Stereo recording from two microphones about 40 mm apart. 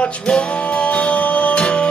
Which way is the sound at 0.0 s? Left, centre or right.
Left.